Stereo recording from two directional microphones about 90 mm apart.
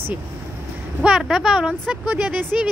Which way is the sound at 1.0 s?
5° right (ahead or behind).